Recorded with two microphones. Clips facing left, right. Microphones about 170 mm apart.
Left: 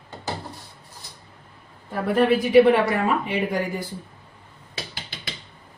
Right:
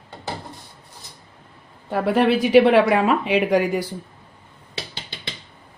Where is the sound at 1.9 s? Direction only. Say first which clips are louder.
Right 2 dB; 90° right.